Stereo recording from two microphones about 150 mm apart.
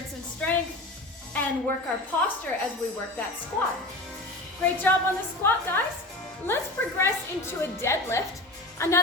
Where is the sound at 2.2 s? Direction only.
15° left (ahead or behind).